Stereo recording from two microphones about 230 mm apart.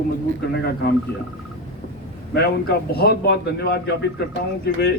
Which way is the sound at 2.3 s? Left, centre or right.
Left.